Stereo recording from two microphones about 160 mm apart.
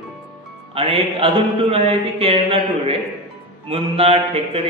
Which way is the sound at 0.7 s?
35° right (ahead or behind).